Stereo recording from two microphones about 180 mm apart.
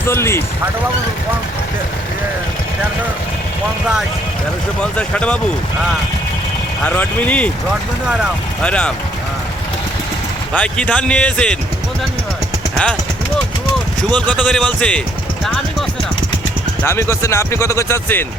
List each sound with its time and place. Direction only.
0.0 s speech: 15° left (ahead or behind)
4.8 s speech: 5° left (ahead or behind)
6.8 s speech: 10° left (ahead or behind)
8.6 s speech: 5° left (ahead or behind)
10.5 s speech: 5° left (ahead or behind)
12.7 s speech: 5° left (ahead or behind)
14.1 s speech: 5° left (ahead or behind)
16.8 s speech: 15° left (ahead or behind)